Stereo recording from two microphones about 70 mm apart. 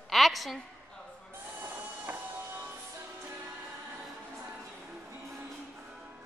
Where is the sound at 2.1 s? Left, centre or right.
Right.